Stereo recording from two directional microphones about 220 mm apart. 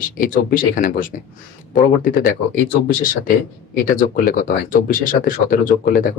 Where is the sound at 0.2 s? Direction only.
40° left (ahead or behind).